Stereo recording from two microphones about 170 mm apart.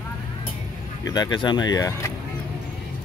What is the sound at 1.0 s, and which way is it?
Speech, 25° left (ahead or behind).